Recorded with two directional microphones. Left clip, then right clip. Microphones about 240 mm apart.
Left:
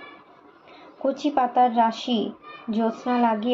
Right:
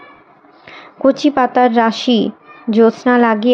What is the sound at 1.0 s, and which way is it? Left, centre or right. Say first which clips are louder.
Speech: right 10 dB; right.